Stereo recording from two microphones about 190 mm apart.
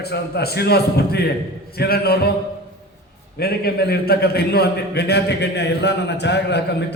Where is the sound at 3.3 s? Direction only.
55° left (ahead or behind).